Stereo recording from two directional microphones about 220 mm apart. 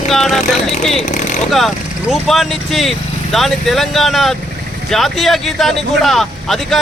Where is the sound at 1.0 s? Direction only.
35° left (ahead or behind).